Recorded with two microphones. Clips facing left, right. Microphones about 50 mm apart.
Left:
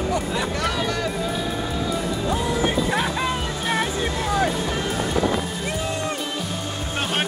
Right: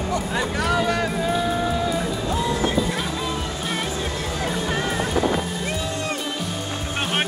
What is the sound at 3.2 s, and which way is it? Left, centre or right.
Music, left.